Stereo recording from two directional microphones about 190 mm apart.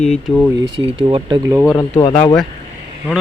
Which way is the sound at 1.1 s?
25° right (ahead or behind).